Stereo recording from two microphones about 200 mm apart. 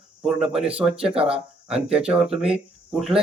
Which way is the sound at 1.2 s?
30° right (ahead or behind).